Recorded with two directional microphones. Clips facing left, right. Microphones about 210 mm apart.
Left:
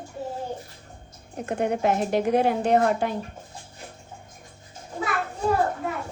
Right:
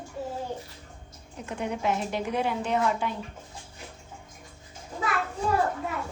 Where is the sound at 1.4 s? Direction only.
45° left (ahead or behind).